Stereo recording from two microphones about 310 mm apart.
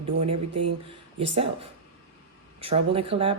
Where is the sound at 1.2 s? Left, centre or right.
Centre.